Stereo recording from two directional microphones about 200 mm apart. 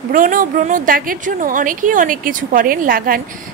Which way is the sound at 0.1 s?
40° right (ahead or behind).